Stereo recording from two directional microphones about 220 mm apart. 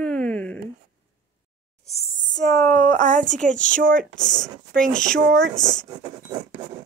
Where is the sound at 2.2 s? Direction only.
15° left (ahead or behind).